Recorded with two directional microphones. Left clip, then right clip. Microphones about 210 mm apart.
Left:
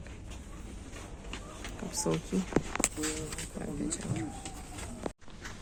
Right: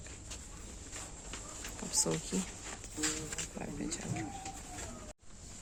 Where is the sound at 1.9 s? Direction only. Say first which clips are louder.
Left 2 dB; 15° right (ahead or behind).